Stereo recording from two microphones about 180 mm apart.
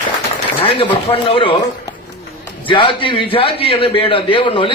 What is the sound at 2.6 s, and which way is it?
A man's voice, 30° left (ahead or behind).